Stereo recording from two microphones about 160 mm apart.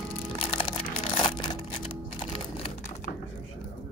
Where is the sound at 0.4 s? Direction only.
35° left (ahead or behind).